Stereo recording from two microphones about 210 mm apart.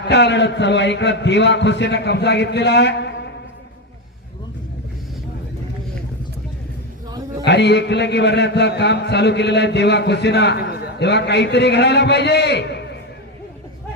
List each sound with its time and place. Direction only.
0.1 s a man's voice: 55° left (ahead or behind)
7.4 s a man's voice: 55° left (ahead or behind)